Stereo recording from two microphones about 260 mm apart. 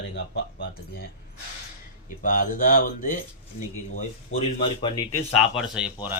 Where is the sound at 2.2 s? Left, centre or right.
Left.